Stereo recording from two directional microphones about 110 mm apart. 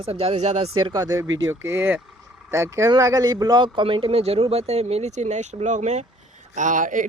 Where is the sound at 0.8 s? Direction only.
40° right (ahead or behind).